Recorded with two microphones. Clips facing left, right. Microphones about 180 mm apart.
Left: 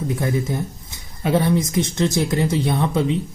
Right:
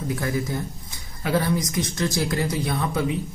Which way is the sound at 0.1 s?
25° left (ahead or behind).